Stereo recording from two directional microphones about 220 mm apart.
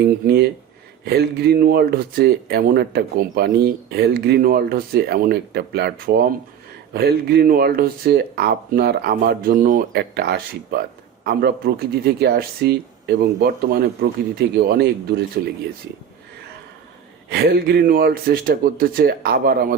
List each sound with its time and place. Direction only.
0.0 s speech: 45° right (ahead or behind)
17.2 s speech: 45° right (ahead or behind)